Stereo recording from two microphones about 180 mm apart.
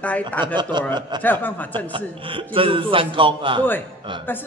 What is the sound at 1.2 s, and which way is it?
Speech, 10° left (ahead or behind).